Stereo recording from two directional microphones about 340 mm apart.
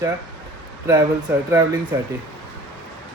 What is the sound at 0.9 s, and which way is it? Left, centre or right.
Speech, centre.